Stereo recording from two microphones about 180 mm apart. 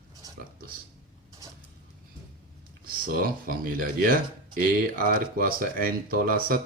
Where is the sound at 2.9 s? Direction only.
55° right (ahead or behind).